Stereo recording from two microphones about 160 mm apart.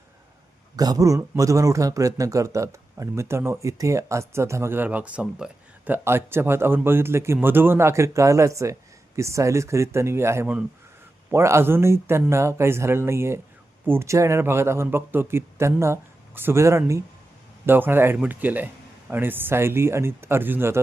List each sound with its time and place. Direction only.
0.8 s a man's voice: 20° right (ahead or behind)